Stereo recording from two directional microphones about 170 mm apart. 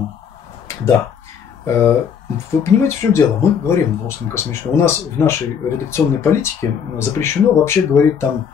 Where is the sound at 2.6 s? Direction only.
15° left (ahead or behind).